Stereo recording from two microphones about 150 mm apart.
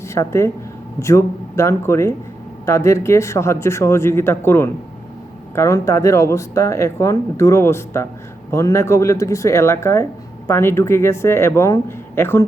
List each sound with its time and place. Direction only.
0.1 s speech: 20° left (ahead or behind)